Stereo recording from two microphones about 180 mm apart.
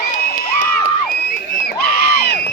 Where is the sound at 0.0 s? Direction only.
55° left (ahead or behind).